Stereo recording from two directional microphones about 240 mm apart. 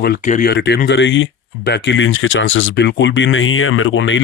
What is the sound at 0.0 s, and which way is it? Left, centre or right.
Speech, left.